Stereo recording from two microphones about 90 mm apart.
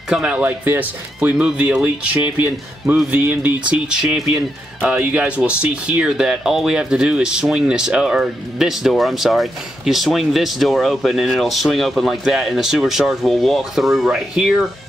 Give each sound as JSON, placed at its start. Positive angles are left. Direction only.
{"t": 0.1, "sound": "speech", "side_deg": -10}
{"t": 3.9, "sound": "speech", "side_deg": -10}